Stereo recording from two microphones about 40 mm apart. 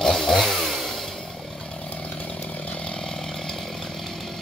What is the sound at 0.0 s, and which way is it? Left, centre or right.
Chainsaw, centre.